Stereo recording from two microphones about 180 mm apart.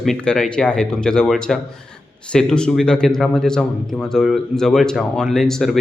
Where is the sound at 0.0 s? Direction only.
5° left (ahead or behind).